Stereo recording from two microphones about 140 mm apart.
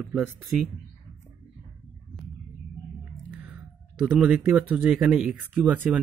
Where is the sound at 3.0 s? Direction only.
15° right (ahead or behind).